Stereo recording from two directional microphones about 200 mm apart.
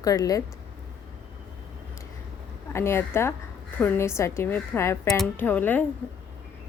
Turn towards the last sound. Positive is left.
turn(degrees=10)  # may be behind; listen again after turning